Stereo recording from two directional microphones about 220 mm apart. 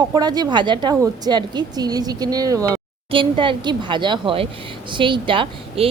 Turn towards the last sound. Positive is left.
turn(degrees=-25)  # may be behind; listen again after turning